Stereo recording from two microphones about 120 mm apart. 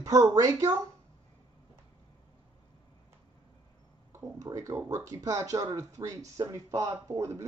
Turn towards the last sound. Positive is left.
turn(degrees=-25)  # may be behind; listen again after turning